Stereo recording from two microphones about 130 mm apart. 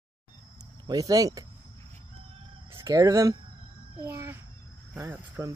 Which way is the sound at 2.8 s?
25° right (ahead or behind).